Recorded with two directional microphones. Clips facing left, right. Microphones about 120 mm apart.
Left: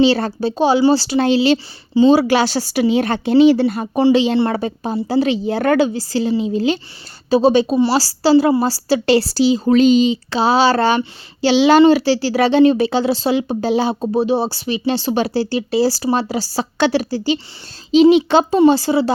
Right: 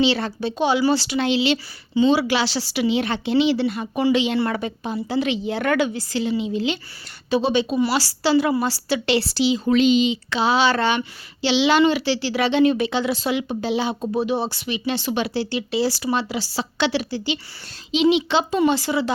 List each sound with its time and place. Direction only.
0.0 s a woman's voice: 40° left (ahead or behind)
18.6 s a woman's voice: 30° left (ahead or behind)